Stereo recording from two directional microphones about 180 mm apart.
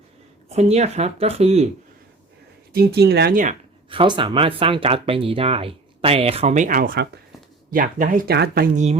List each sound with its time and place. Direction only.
0.4 s speech: 35° right (ahead or behind)
2.7 s speech: 65° right (ahead or behind); by 3.6 s 45° right (ahead or behind)
3.8 s speech: 25° right (ahead or behind); by 8.7 s 60° right (ahead or behind)
8.7 s speech: 40° right (ahead or behind)